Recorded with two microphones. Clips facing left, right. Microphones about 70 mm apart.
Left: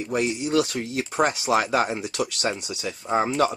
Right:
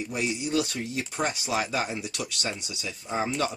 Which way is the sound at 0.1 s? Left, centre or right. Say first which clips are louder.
Left 6 dB; left.